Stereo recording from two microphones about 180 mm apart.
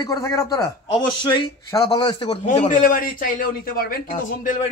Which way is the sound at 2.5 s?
45° left (ahead or behind).